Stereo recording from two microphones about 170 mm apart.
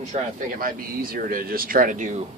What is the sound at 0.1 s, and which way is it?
Speech, 55° right (ahead or behind).